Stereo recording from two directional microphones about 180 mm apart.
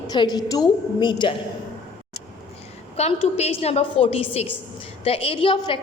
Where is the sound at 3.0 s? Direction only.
35° left (ahead or behind).